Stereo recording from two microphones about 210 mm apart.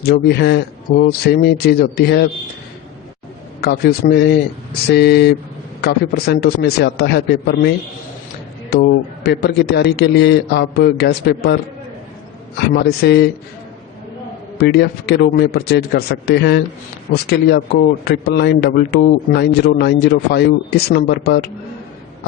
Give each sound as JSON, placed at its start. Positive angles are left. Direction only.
{"t": 0.0, "sound": "speech", "side_deg": 50}
{"t": 3.6, "sound": "speech", "side_deg": 50}
{"t": 8.7, "sound": "speech", "side_deg": 50}
{"t": 12.5, "sound": "speech", "side_deg": 50}
{"t": 14.6, "sound": "speech", "side_deg": 50}